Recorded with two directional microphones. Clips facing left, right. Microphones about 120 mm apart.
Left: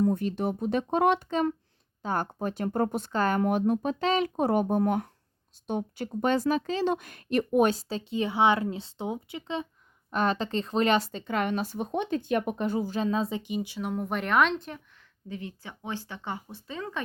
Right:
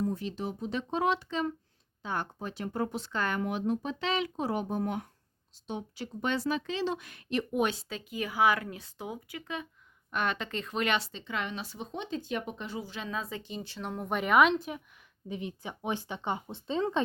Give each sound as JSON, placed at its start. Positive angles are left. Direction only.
{"t": 0.0, "sound": "speech", "side_deg": 55}
{"t": 3.4, "sound": "speech", "side_deg": 50}
{"t": 13.1, "sound": "speech", "side_deg": 25}
{"t": 13.4, "sound": "speech", "side_deg": 15}
{"t": 15.3, "sound": "speech", "side_deg": -20}